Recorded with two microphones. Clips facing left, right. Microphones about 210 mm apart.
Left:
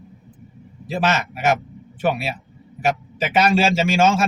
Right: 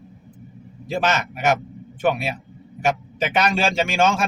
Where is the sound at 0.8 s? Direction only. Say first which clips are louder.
Left 1 dB; 5° left (ahead or behind).